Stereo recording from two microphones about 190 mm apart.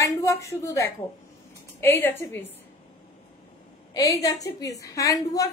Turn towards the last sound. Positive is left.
turn(degrees=15)  # may be behind; listen again after turning